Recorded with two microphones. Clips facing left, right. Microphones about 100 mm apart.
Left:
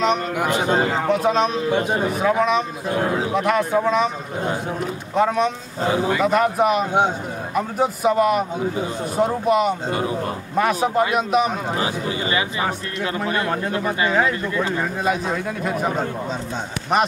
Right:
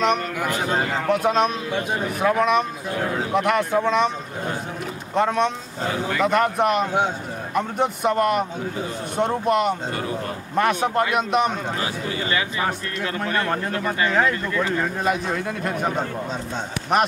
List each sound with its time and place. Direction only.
0.4 s a man's voice: 20° left (ahead or behind)
1.1 s a man's voice: centre (ahead or behind)
1.8 s a man's voice: 30° left (ahead or behind)
2.1 s a man's voice: centre (ahead or behind)
2.9 s a man's voice: 25° left (ahead or behind)
3.3 s a man's voice: centre (ahead or behind)
5.1 s a man's voice: centre (ahead or behind)
5.9 s speech: 15° left (ahead or behind)
6.2 s a man's voice: centre (ahead or behind)
9.8 s a man's voice: 20° left (ahead or behind)
10.5 s a man's voice: centre (ahead or behind)
11.7 s a man's voice: 20° left (ahead or behind); by 17.1 s centre (ahead or behind)